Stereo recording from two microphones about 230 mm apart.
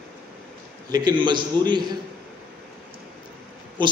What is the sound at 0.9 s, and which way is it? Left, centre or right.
A man's voice, centre.